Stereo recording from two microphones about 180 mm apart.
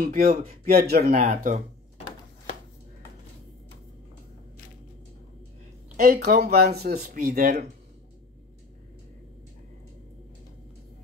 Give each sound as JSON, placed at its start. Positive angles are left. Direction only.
{"t": 0.0, "sound": "speech", "side_deg": -55}
{"t": 1.2, "sound": "speech", "side_deg": -45}
{"t": 5.9, "sound": "speech", "side_deg": -55}